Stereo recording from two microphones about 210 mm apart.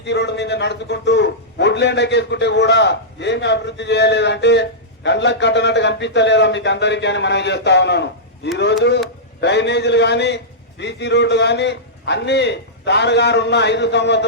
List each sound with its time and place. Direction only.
0.0 s a man's voice: 55° left (ahead or behind)
9.4 s a man's voice: 55° left (ahead or behind)